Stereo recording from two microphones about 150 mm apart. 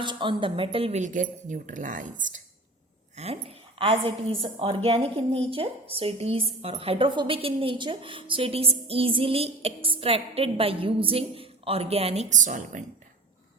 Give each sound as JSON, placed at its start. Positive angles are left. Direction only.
{"t": 0.0, "sound": "speech", "side_deg": -30}
{"t": 3.8, "sound": "a woman's voice", "side_deg": -35}